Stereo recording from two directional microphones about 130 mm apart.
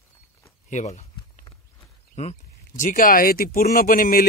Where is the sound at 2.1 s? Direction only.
65° left (ahead or behind); by 4.1 s 90° left.